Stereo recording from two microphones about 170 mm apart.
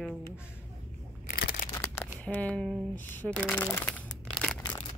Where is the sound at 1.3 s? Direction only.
65° left (ahead or behind).